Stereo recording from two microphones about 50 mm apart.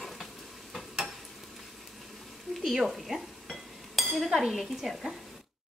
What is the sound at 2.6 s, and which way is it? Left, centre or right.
Stir, centre.